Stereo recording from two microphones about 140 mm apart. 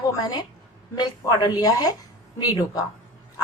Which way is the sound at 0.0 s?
25° left (ahead or behind).